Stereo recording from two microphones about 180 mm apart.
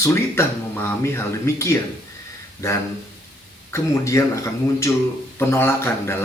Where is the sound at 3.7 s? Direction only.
15° left (ahead or behind).